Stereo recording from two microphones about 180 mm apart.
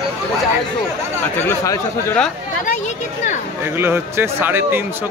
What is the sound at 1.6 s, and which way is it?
Speech, 15° left (ahead or behind).